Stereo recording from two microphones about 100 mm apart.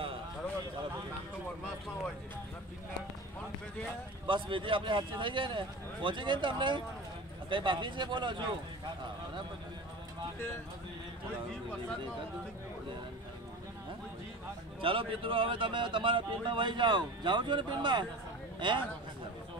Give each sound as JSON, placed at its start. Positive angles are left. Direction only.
{"t": 4.3, "sound": "speech", "side_deg": -55}
{"t": 14.8, "sound": "speech", "side_deg": -60}